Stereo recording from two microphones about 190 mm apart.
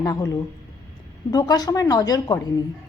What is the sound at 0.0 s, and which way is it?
A woman's voice, 20° left (ahead or behind).